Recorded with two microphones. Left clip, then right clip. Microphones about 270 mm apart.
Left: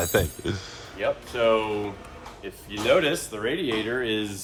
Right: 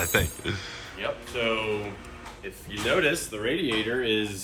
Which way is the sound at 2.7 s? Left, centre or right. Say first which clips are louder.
Left 3 dB; left.